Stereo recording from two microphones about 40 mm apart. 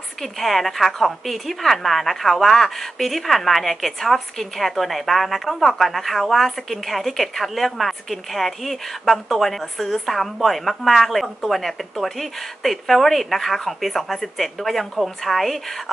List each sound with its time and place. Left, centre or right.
0.2 s a woman's voice: centre